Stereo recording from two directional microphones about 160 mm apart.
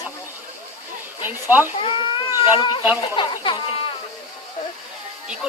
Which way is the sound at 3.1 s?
30° left (ahead or behind).